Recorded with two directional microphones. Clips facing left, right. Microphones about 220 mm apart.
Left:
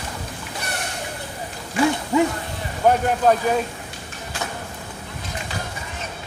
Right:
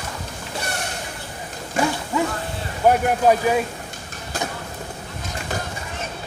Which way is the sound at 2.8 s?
10° right (ahead or behind).